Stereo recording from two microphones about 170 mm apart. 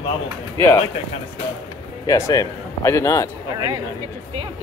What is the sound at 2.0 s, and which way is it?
A man's voice, 20° left (ahead or behind).